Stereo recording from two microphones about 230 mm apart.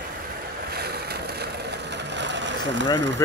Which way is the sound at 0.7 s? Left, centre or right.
Right.